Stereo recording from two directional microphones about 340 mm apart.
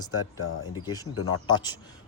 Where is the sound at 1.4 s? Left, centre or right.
Centre.